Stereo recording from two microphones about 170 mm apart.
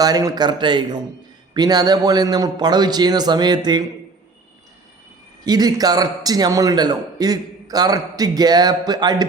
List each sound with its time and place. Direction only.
0.0 s a man's voice: 20° right (ahead or behind)
5.5 s a man's voice: 25° right (ahead or behind)